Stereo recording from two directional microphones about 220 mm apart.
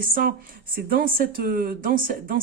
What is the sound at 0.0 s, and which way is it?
Speech, 40° right (ahead or behind).